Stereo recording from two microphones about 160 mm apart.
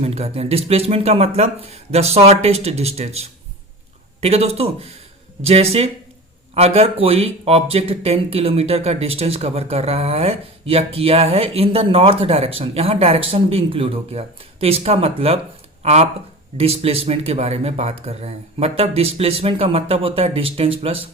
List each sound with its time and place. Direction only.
0.0 s speech: 40° right (ahead or behind)